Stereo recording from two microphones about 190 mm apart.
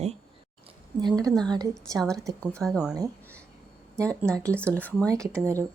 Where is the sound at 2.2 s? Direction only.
15° right (ahead or behind).